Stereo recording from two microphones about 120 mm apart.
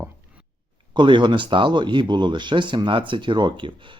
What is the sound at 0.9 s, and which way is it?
Speech, 40° right (ahead or behind).